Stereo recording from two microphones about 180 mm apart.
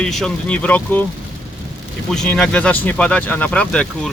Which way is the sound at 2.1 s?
5° left (ahead or behind).